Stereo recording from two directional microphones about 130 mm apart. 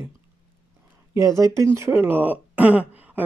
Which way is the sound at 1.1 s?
25° right (ahead or behind).